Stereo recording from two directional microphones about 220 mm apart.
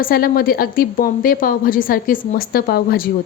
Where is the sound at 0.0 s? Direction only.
40° left (ahead or behind).